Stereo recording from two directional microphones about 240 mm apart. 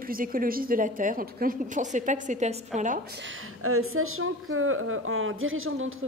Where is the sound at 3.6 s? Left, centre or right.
Right.